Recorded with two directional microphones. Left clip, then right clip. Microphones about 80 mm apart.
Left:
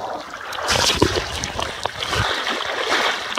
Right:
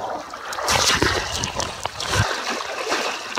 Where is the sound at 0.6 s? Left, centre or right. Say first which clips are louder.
Even; centre.